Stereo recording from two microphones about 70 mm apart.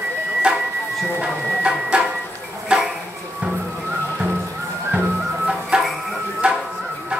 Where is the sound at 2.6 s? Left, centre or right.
Centre.